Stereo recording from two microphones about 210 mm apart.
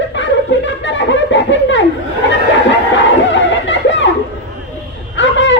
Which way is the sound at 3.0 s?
60° left (ahead or behind).